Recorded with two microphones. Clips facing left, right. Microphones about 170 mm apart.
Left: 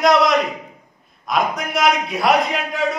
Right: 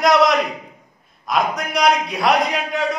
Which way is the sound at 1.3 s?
Centre (ahead or behind).